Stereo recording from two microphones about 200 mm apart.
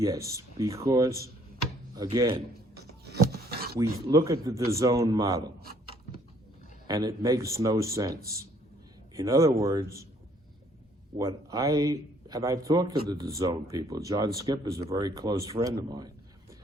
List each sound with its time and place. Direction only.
0.0 s a man's voice: 15° right (ahead or behind)
2.7 s a sound: 55° right (ahead or behind)
3.8 s a man's voice: 15° right (ahead or behind)
6.8 s a man's voice: 20° right (ahead or behind)
11.2 s a man's voice: 15° right (ahead or behind)